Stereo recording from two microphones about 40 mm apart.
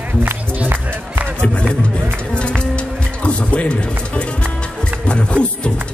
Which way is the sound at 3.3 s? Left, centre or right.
Left.